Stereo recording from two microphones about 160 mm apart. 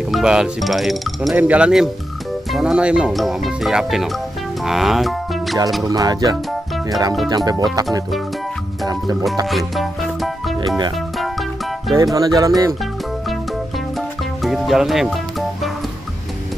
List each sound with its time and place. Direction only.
0.1 s speech: 5° right (ahead or behind)
5.9 s speech: 20° right (ahead or behind)
9.5 s music: centre (ahead or behind)
11.9 s speech: 25° right (ahead or behind)
14.4 s speech: centre (ahead or behind)